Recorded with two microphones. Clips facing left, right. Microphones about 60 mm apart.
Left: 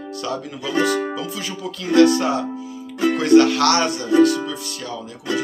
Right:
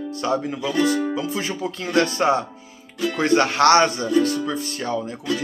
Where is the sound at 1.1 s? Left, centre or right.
Right.